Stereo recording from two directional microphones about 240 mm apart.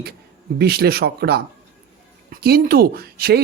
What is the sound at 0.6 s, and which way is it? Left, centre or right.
Speech, right.